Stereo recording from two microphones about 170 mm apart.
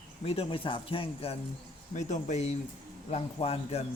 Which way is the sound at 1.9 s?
45° left (ahead or behind).